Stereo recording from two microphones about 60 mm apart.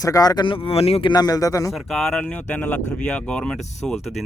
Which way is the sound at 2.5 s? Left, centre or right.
Left.